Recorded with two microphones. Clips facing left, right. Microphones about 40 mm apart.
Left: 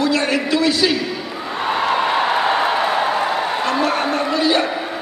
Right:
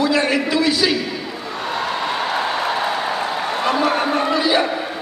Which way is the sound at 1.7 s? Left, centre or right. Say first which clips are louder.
Left 5 dB; left.